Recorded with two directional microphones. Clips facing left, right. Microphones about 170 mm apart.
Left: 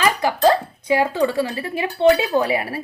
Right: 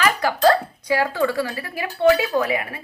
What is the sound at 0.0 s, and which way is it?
A woman's voice, 20° left (ahead or behind).